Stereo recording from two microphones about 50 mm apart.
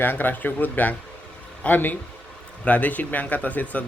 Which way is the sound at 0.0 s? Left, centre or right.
Left.